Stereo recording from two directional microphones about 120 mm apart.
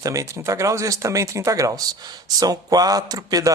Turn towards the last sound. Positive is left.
turn(degrees=-30)  # may be behind; listen again after turning